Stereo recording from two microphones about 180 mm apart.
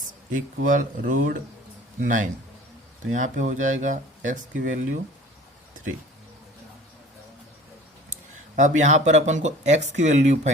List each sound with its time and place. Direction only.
0.6 s speech: 50° right (ahead or behind)
8.1 s a sound: 45° right (ahead or behind)
8.8 s speech: 40° right (ahead or behind)